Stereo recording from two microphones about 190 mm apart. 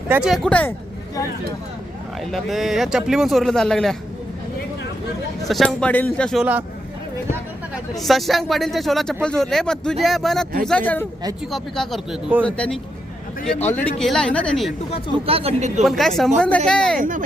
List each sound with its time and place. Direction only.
0.1 s speech: 5° right (ahead or behind)
2.3 s speech: centre (ahead or behind)
5.5 s speech: 5° left (ahead or behind)
8.0 s speech: centre (ahead or behind)
15.3 s speech: 30° right (ahead or behind)
15.8 s speech: centre (ahead or behind)
17.0 s speech: 45° right (ahead or behind)